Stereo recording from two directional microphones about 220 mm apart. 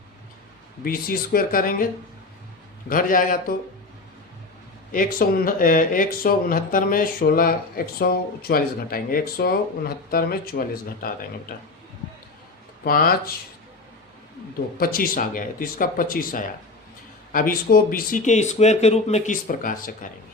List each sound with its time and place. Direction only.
0.9 s speech: 40° left (ahead or behind)
2.9 s speech: 40° left (ahead or behind)
4.9 s speech: 40° left (ahead or behind)
12.8 s speech: 40° left (ahead or behind)
14.8 s speech: 40° left (ahead or behind)